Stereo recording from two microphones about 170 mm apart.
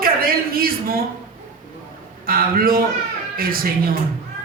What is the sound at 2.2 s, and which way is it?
A man's voice, 60° right (ahead or behind).